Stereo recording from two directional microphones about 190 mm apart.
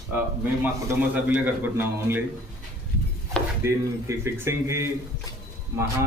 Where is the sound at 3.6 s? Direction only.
15° right (ahead or behind).